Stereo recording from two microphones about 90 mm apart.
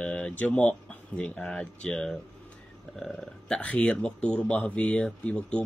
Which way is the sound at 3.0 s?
5° left (ahead or behind).